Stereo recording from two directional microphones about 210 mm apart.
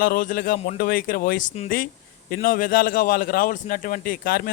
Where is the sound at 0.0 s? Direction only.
45° left (ahead or behind).